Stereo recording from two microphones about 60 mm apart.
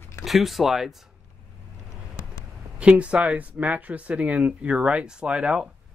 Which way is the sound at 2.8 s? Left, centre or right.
Centre.